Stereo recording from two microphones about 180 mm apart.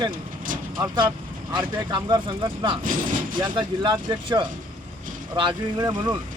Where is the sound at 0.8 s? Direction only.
25° right (ahead or behind).